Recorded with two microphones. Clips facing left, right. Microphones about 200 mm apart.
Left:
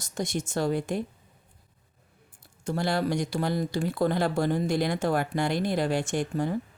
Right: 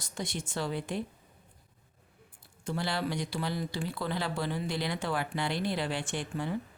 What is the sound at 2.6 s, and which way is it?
Speech, 45° left (ahead or behind).